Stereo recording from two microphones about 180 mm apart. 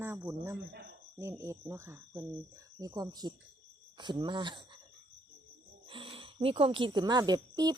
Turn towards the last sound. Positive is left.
turn(degrees=-20)  # may be behind; listen again after turning